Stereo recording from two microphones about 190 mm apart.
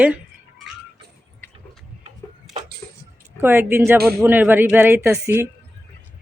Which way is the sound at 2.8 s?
15° left (ahead or behind).